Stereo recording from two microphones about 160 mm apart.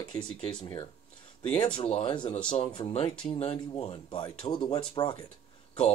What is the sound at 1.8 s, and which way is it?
Speech, 35° left (ahead or behind).